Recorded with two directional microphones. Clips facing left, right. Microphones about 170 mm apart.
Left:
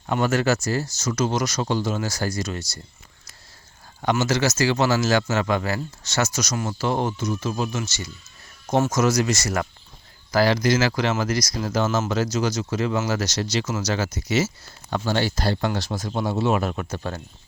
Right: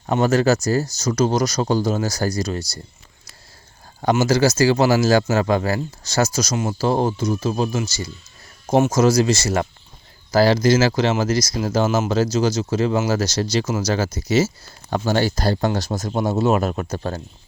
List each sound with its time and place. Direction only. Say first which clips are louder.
0.1 s speech: right 4 dB; 30° right (ahead or behind)
4.2 s speech: right 6 dB; 35° right (ahead or behind)